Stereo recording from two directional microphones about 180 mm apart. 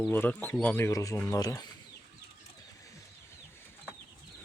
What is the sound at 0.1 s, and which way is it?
Speech, 10° left (ahead or behind).